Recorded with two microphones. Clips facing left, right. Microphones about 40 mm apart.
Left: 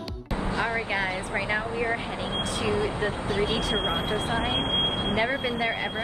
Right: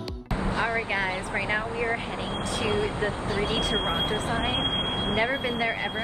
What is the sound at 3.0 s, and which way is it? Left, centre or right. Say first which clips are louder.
Speech: left 1 dB; left.